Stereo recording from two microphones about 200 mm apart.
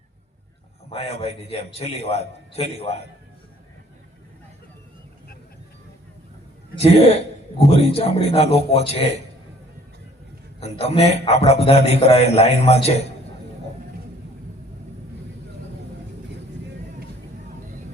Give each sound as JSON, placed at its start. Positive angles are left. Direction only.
{"t": 0.9, "sound": "a man's voice", "side_deg": 30}
{"t": 6.7, "sound": "a man's voice", "side_deg": 30}
{"t": 10.6, "sound": "a man's voice", "side_deg": 30}